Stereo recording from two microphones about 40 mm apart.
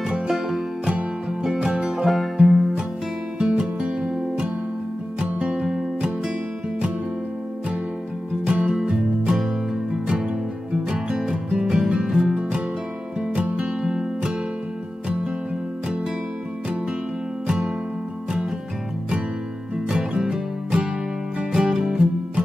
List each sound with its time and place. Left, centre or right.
1.4 s music: centre
1.9 s music: centre
3.3 s music: right
5.2 s music: right
8.5 s music: right
10.7 s music: right
11.7 s music: centre
13.8 s music: right
20.2 s music: centre